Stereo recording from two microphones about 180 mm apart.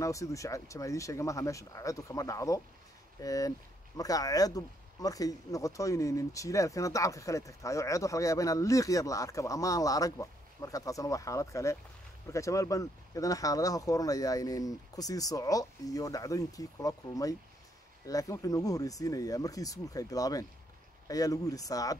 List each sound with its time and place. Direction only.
0.0 s speech: 15° left (ahead or behind)